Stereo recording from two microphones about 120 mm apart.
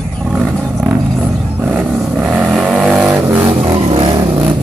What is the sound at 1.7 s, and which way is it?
Vehicle, 10° right (ahead or behind).